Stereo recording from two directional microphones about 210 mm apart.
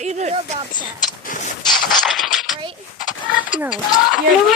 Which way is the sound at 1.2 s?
40° left (ahead or behind).